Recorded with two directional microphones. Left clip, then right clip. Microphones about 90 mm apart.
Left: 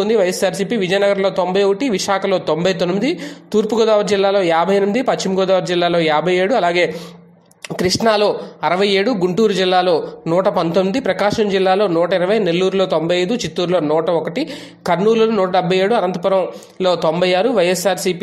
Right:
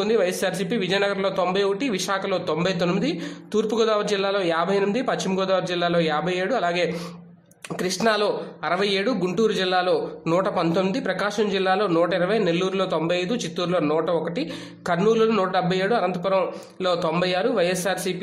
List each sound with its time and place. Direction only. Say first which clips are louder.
0.0 s a man's voice: left 6 dB; 40° left (ahead or behind)
8.1 s a man's voice: left 6 dB; 45° left (ahead or behind)